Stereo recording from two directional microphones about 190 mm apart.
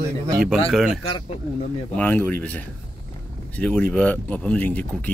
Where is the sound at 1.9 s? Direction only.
10° left (ahead or behind).